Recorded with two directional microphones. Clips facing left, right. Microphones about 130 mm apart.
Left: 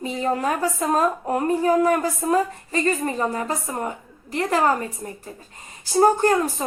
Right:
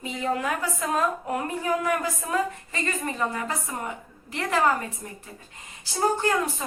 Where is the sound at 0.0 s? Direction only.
35° left (ahead or behind).